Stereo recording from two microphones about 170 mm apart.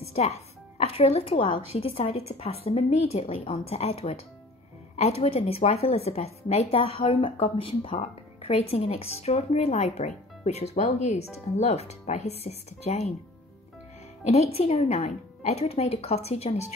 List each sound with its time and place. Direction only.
0.0 s a woman's voice: 40° left (ahead or behind)
14.2 s a woman's voice: 40° left (ahead or behind)